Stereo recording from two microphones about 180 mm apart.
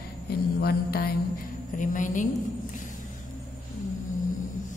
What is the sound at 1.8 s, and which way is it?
Speech, 45° left (ahead or behind).